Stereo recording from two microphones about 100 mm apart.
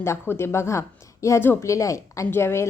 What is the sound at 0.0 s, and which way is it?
A woman's voice, 25° left (ahead or behind).